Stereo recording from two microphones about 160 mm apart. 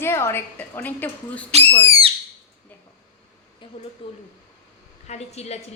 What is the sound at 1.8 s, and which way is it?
Owl, 35° right (ahead or behind).